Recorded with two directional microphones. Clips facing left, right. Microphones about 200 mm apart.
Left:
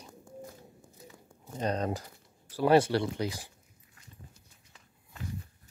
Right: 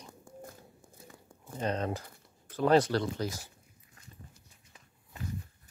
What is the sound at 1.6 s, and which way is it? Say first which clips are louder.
Speech: left 1 dB; 35° left (ahead or behind).